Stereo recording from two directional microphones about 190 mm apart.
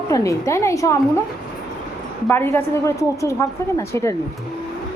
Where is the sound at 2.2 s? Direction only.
10° left (ahead or behind).